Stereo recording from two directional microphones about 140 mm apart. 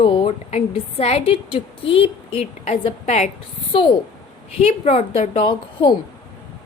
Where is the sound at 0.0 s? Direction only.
40° left (ahead or behind).